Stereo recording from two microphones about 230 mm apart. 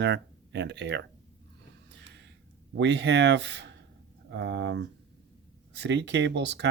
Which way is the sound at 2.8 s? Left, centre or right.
Right.